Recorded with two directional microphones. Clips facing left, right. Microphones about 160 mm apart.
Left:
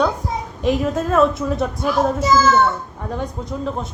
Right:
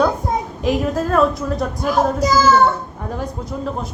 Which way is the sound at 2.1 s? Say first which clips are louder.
Even; 40° right (ahead or behind).